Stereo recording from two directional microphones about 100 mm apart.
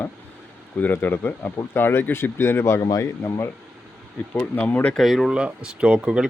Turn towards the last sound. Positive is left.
turn(degrees=-10)  # may be behind; listen again after turning